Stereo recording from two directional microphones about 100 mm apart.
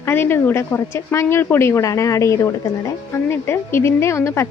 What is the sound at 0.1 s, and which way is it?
Speech, 20° left (ahead or behind).